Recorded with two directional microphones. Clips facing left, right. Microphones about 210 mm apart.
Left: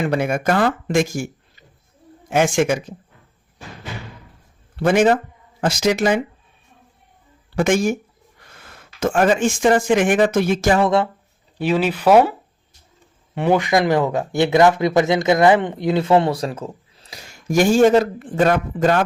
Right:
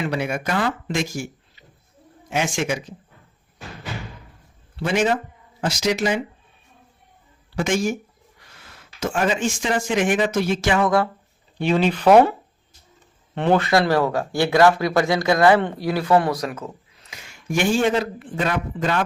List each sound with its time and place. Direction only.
0.0 s speech: 50° left (ahead or behind)
4.8 s speech: 50° left (ahead or behind)
7.5 s speech: 55° left (ahead or behind)
10.8 s speech: 25° left (ahead or behind)
11.5 s speech: 5° left (ahead or behind)
13.3 s speech: 10° left (ahead or behind); by 19.0 s 45° left (ahead or behind)